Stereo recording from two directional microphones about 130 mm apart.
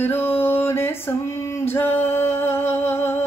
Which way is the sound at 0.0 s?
15° left (ahead or behind).